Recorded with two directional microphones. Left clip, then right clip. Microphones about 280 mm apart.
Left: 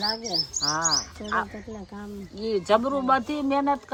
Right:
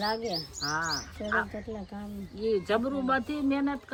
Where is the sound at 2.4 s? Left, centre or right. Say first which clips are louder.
Left 5 dB; left.